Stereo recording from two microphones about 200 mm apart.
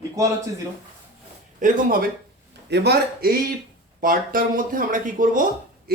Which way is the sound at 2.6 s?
55° right (ahead or behind).